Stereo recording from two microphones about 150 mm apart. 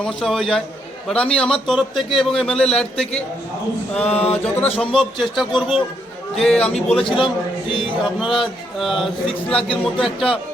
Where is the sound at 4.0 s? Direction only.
45° left (ahead or behind).